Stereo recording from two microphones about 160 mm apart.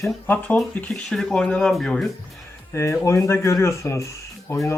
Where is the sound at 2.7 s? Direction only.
15° left (ahead or behind).